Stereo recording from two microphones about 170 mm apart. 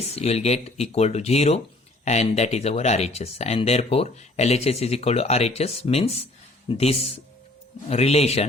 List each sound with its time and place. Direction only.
0.2 s speech: 40° left (ahead or behind)